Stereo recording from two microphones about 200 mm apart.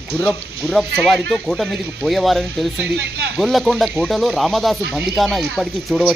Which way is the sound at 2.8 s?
60° right (ahead or behind).